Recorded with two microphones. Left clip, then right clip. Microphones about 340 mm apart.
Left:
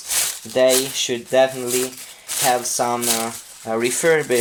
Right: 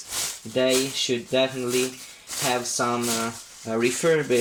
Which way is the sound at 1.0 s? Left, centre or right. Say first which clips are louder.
Left 3 dB; left.